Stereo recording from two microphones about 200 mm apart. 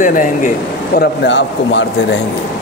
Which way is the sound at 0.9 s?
65° left (ahead or behind).